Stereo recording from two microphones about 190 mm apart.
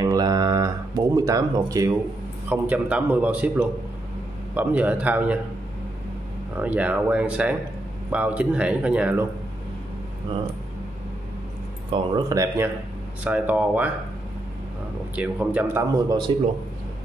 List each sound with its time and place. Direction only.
0.0 s a sound: 20° right (ahead or behind)
2.5 s a man's voice: 5° right (ahead or behind)
6.6 s a man's voice: 10° right (ahead or behind)
11.9 s a man's voice: 25° right (ahead or behind)
15.1 s a man's voice: 10° right (ahead or behind)